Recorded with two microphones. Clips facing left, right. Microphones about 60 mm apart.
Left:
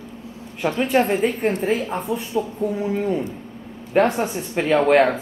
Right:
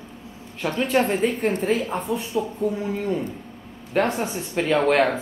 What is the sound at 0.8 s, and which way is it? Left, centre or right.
Speech, centre.